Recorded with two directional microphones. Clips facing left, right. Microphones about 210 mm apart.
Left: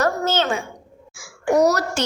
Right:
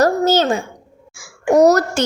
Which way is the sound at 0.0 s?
40° right (ahead or behind).